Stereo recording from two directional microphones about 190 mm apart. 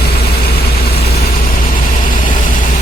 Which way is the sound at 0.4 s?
55° left (ahead or behind).